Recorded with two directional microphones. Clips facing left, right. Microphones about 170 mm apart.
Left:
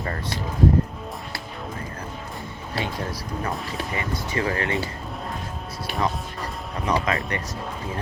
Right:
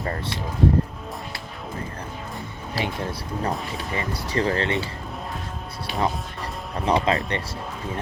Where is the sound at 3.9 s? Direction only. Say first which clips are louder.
Right 3 dB; 35° right (ahead or behind).